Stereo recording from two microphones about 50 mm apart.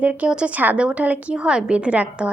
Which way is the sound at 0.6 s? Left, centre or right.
Right.